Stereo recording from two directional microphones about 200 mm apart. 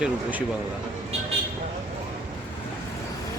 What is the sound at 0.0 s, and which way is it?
Speech, 10° right (ahead or behind).